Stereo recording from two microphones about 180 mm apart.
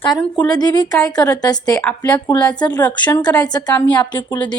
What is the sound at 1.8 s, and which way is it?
A woman's voice, 10° left (ahead or behind).